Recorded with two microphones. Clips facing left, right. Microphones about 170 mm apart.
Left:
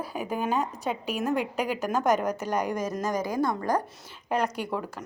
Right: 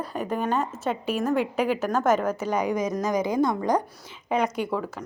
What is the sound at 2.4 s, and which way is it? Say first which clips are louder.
Speech: right 3 dB; 10° left (ahead or behind).